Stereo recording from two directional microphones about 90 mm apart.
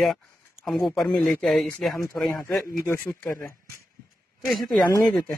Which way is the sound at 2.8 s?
25° left (ahead or behind).